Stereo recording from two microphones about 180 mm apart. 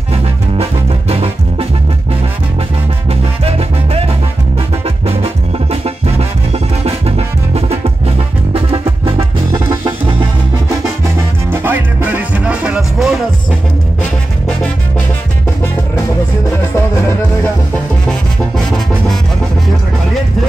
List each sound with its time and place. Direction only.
0.1 s music: 35° right (ahead or behind)
3.1 s music: 35° right (ahead or behind)
11.5 s music: 10° right (ahead or behind)
16.7 s music: 15° left (ahead or behind)